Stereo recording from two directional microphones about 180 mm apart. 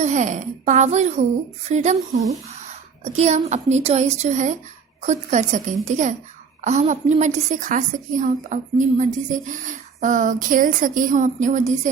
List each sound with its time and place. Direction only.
0.0 s a woman's voice: 40° right (ahead or behind)